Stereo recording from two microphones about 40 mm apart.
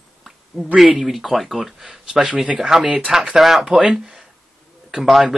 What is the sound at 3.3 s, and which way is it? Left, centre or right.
Speech, centre.